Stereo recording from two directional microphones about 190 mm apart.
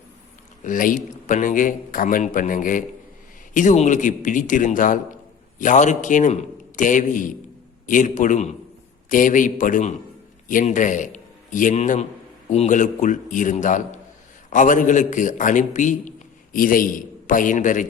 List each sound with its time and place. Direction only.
0.6 s a man's voice: 45° left (ahead or behind)